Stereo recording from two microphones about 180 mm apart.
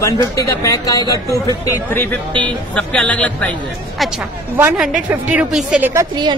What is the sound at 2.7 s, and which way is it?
A man's voice, 5° left (ahead or behind).